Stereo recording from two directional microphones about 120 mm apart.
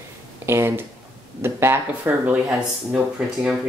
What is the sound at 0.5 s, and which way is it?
Speech, 20° right (ahead or behind).